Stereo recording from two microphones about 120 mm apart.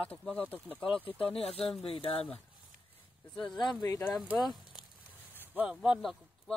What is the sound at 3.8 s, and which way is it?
Speech, 25° left (ahead or behind).